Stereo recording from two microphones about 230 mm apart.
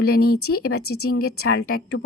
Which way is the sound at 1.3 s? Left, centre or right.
Left.